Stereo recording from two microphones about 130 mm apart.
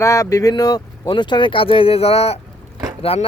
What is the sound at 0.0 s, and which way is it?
Speech, 25° left (ahead or behind).